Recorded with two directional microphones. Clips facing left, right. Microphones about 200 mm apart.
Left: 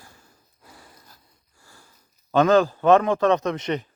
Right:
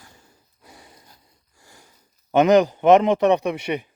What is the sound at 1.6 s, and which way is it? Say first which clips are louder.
Sniff: right 2 dB; 20° right (ahead or behind).